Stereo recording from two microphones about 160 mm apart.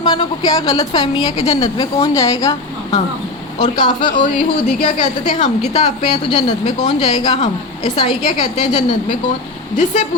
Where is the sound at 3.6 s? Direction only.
30° left (ahead or behind).